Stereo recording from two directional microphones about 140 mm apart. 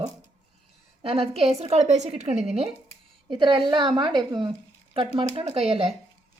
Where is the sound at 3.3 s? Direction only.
35° right (ahead or behind).